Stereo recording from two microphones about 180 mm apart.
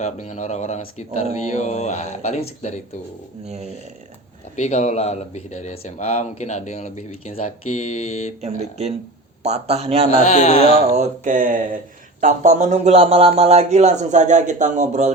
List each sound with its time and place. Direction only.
0.0 s speech: 40° left (ahead or behind)
4.5 s speech: 40° left (ahead or behind)
8.4 s a man's voice: 40° right (ahead or behind)
10.1 s speech: 40° left (ahead or behind)
10.9 s a sound: 40° right (ahead or behind)
12.2 s a man's voice: 45° right (ahead or behind)